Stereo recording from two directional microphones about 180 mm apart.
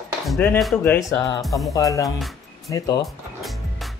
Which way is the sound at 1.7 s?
20° left (ahead or behind).